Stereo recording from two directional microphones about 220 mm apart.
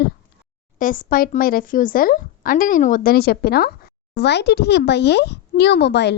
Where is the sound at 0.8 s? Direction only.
40° left (ahead or behind).